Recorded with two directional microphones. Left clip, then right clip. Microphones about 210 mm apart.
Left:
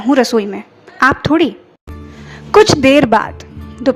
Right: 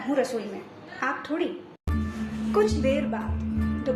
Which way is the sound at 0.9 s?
50° left (ahead or behind).